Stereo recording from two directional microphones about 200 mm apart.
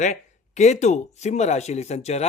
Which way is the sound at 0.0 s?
35° left (ahead or behind).